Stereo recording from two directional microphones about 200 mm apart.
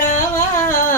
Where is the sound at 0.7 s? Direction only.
40° left (ahead or behind).